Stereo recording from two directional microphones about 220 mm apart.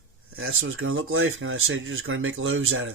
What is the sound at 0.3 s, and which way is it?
Speech, 65° right (ahead or behind).